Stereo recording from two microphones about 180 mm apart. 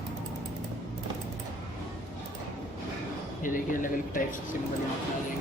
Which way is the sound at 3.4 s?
50° left (ahead or behind).